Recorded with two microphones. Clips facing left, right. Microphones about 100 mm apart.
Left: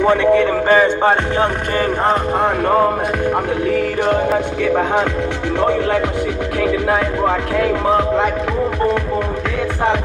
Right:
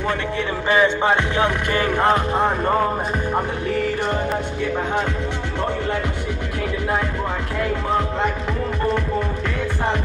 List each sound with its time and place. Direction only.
0.0 s speech: 60° left (ahead or behind)
0.7 s music: 40° left (ahead or behind)
2.4 s music: 10° left (ahead or behind)
6.9 s music: 90° left